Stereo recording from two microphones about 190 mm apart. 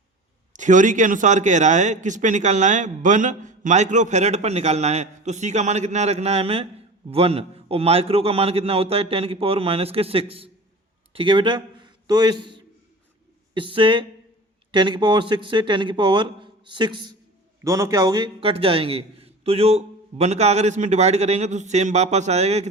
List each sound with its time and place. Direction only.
0.5 s a man's voice: 40° right (ahead or behind)